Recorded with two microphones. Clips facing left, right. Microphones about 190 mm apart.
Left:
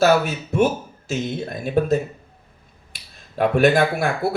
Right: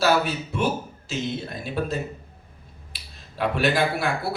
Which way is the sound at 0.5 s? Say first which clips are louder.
Left 8 dB; 50° left (ahead or behind).